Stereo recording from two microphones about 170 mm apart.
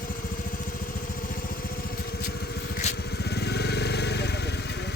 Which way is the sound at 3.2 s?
75° left (ahead or behind).